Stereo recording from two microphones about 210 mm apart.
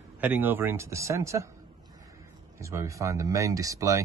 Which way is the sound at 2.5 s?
15° right (ahead or behind).